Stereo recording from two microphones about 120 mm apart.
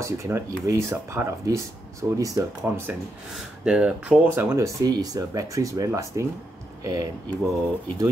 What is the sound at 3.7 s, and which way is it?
Speech, 10° right (ahead or behind).